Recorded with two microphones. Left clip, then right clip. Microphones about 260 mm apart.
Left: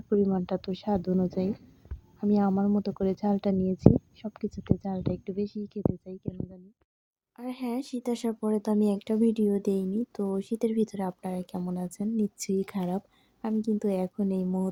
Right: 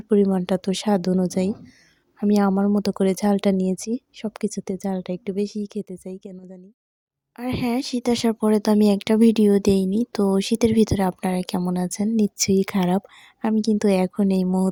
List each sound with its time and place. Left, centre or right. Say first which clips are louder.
0.1 s speech: right 7 dB; right
7.3 s speech: right 9 dB; right